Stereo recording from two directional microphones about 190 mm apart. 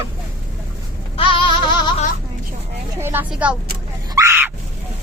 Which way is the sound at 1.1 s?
25° left (ahead or behind).